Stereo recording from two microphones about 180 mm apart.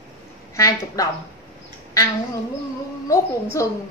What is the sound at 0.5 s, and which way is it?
Speech, 20° left (ahead or behind).